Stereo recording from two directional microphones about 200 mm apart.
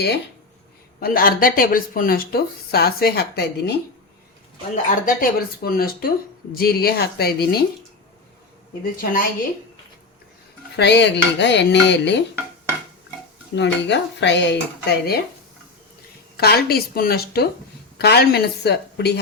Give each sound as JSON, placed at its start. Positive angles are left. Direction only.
{"t": 0.9, "sound": "speech", "side_deg": 45}
{"t": 4.9, "sound": "speech", "side_deg": 45}
{"t": 9.0, "sound": "speech", "side_deg": 45}
{"t": 10.8, "sound": "dishes", "side_deg": 60}
{"t": 13.6, "sound": "dishes", "side_deg": 60}
{"t": 16.4, "sound": "speech", "side_deg": 50}
{"t": 17.9, "sound": "dishes", "side_deg": 55}